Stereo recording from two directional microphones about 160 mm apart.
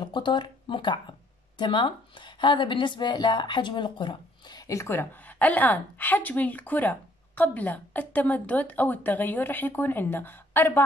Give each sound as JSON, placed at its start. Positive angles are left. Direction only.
{"t": 0.0, "sound": "speech", "side_deg": 30}